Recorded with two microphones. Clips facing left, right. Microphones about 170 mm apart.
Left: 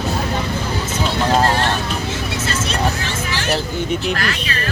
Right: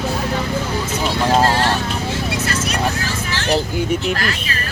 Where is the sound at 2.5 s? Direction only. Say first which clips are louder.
Even; 30° left (ahead or behind).